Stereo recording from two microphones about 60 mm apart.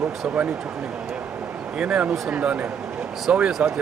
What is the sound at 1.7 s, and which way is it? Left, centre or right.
Speech, centre.